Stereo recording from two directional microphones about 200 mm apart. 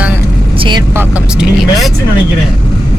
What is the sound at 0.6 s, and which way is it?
Speech, 25° right (ahead or behind).